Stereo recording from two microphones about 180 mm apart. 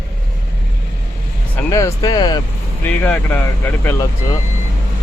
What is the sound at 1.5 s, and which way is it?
Speech, 20° left (ahead or behind).